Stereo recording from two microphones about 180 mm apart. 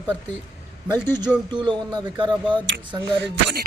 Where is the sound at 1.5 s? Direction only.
25° right (ahead or behind).